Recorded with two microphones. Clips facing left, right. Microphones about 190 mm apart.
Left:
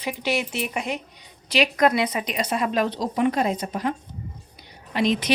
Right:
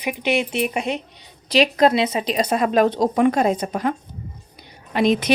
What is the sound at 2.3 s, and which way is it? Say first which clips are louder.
Speech: right 6 dB; 40° right (ahead or behind).